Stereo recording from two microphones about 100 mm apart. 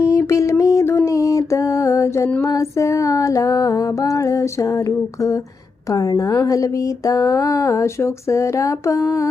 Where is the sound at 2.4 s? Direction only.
35° left (ahead or behind).